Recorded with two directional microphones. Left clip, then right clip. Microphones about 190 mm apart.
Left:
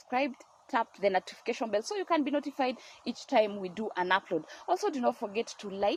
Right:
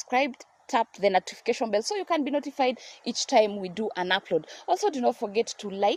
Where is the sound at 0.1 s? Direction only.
60° right (ahead or behind).